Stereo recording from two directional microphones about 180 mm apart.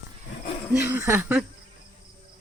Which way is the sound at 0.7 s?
10° right (ahead or behind).